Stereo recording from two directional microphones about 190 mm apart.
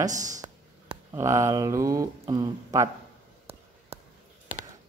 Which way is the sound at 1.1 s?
15° right (ahead or behind).